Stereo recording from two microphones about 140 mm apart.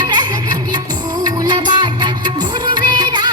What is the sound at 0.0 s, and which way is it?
Music, 30° right (ahead or behind).